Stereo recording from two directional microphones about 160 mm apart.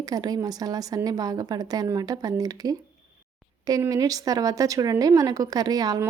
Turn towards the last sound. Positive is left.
turn(degrees=-25)  # may be behind; listen again after turning